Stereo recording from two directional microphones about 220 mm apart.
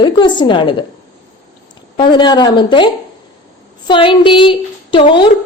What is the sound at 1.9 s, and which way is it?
A woman's voice, 20° left (ahead or behind).